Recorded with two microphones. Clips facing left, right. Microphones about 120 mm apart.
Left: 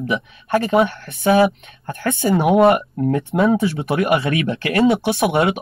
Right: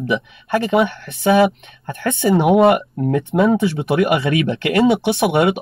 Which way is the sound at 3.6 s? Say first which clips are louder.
Right 2 dB; 25° right (ahead or behind).